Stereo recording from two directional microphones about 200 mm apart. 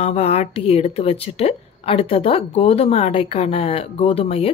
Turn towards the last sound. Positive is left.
turn(degrees=30)  # may be behind; listen again after turning